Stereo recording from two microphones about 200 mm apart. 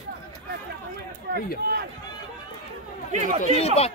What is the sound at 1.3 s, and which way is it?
Run, 55° right (ahead or behind).